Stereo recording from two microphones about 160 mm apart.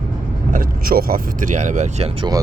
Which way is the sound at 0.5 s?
65° right (ahead or behind).